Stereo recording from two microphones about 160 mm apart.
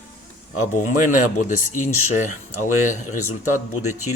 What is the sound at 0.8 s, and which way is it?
Speech, 50° left (ahead or behind).